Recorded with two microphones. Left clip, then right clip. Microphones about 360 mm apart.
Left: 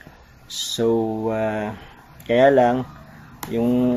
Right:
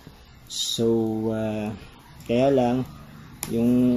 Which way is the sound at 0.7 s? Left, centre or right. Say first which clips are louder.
Left 3 dB; left.